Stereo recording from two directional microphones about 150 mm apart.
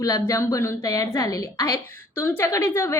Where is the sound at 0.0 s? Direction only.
20° left (ahead or behind).